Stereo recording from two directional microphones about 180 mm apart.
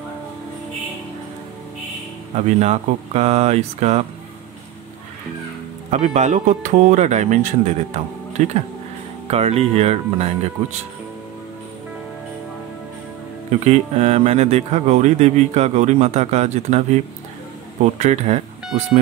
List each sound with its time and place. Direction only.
2.3 s a man's voice: 40° right (ahead or behind)
5.9 s a man's voice: 40° right (ahead or behind)
13.5 s a man's voice: 35° right (ahead or behind)